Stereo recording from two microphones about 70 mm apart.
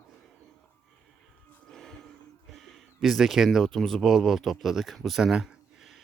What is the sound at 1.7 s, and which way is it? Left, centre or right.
Speech, centre.